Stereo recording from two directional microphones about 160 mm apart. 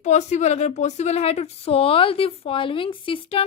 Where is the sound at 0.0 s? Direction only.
45° left (ahead or behind).